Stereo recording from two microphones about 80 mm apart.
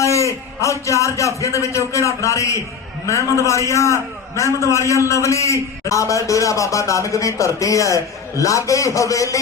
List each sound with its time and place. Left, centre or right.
0.0 s a man's voice: left